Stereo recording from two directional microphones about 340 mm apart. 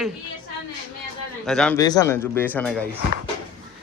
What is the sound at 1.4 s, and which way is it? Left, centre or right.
Speech, centre.